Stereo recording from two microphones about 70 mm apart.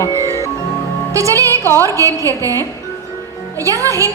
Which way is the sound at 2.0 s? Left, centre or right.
Right.